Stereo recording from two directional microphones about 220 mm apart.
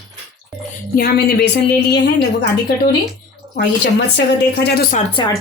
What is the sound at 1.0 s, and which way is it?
Speech, 45° left (ahead or behind).